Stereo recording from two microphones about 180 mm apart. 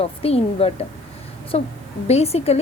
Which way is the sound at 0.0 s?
35° left (ahead or behind).